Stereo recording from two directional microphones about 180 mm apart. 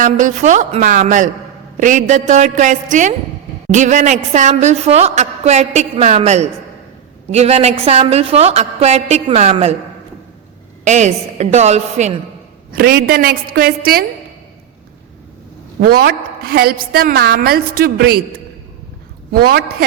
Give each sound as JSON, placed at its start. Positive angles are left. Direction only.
{"t": 0.0, "sound": "a woman's voice", "side_deg": -45}
{"t": 10.8, "sound": "a woman's voice", "side_deg": -40}
{"t": 12.7, "sound": "a woman's voice", "side_deg": -60}
{"t": 15.8, "sound": "a woman's voice", "side_deg": -60}